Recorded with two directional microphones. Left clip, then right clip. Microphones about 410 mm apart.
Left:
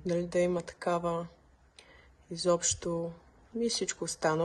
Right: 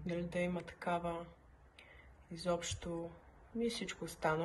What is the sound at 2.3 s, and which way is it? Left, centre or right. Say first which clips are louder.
Speech: left 10 dB; left.